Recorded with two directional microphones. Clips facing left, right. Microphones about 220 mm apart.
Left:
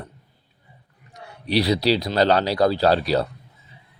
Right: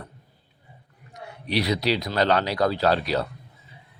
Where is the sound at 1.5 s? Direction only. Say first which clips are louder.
Left 4 dB; 30° left (ahead or behind).